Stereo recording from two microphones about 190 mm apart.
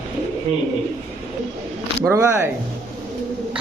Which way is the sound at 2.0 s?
15° right (ahead or behind).